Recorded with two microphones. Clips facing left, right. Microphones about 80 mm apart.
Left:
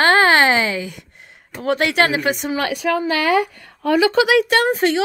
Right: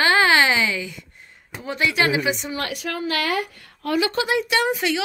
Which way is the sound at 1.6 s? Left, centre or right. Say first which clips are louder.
Left 5 dB; left.